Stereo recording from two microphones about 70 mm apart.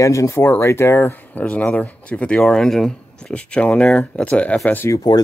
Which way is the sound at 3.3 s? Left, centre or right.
Centre.